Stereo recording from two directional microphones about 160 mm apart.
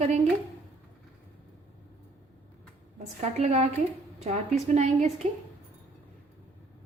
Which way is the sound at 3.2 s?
45° right (ahead or behind).